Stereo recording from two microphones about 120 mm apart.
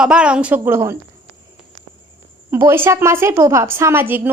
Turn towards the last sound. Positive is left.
turn(degrees=-15)  # may be behind; listen again after turning